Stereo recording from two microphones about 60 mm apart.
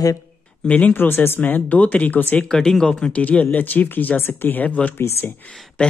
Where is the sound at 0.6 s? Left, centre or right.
Left.